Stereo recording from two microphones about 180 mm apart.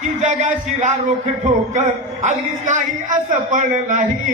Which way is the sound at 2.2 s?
45° right (ahead or behind).